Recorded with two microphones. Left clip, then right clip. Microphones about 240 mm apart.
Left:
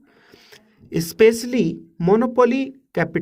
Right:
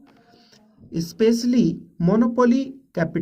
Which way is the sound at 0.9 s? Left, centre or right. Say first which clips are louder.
Left 5 dB; left.